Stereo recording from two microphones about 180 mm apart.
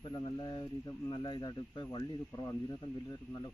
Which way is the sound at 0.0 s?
20° left (ahead or behind).